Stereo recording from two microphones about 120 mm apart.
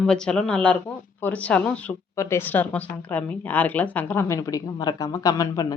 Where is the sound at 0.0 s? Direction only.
5° left (ahead or behind).